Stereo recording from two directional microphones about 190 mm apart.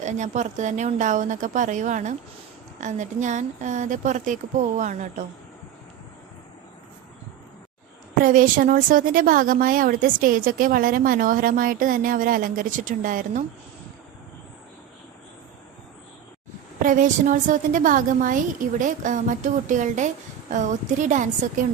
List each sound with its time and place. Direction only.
0.0 s speech: 40° right (ahead or behind)
8.2 s a woman's voice: 45° right (ahead or behind)
16.8 s a woman's voice: 45° right (ahead or behind)